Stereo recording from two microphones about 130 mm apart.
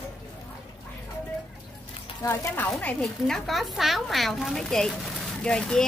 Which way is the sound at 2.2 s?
15° left (ahead or behind).